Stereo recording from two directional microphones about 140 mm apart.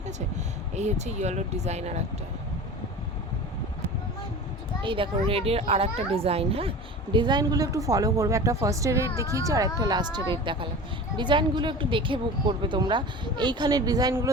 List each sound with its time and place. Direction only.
0.8 s speech: 55° right (ahead or behind)
4.8 s a child's voice: 35° right (ahead or behind)